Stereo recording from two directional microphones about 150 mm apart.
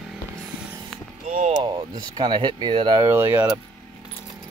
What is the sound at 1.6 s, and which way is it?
Speech, 30° right (ahead or behind).